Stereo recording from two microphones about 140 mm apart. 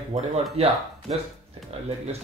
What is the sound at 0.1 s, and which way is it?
Speech, 45° right (ahead or behind).